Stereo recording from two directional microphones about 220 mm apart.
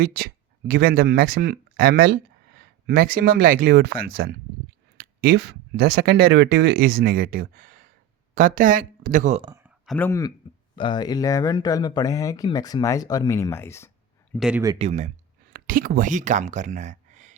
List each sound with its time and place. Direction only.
0.0 s speech: 45° right (ahead or behind)
9.4 s speech: 20° right (ahead or behind)
9.6 s a sound: centre (ahead or behind)
10.1 s speech: 15° left (ahead or behind)
14.3 s speech: 5° right (ahead or behind)
14.8 s speech: 30° right (ahead or behind)